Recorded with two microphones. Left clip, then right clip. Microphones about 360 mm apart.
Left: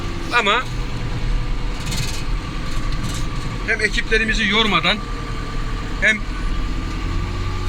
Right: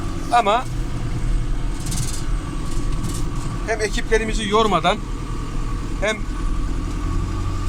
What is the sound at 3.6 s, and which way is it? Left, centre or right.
Speech, centre.